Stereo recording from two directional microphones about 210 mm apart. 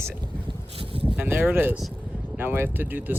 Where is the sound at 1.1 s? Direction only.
10° right (ahead or behind).